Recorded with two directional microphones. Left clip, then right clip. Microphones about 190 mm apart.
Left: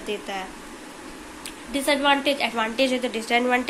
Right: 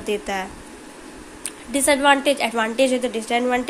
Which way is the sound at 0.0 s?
40° right (ahead or behind).